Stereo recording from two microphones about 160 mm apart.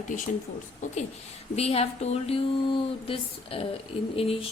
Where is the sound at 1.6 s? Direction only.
40° left (ahead or behind).